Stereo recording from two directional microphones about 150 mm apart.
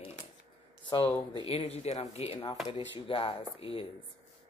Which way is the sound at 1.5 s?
40° left (ahead or behind).